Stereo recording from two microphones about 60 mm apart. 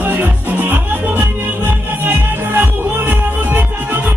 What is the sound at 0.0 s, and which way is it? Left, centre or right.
Music, right.